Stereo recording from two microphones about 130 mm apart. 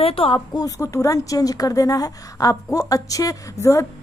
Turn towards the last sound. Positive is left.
turn(degrees=25)  # may be behind; listen again after turning